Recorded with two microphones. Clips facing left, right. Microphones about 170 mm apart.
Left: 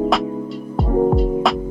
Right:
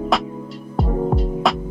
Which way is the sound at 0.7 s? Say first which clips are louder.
Left 5 dB; centre (ahead or behind).